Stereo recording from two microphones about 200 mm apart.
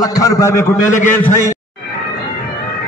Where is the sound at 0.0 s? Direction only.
15° left (ahead or behind).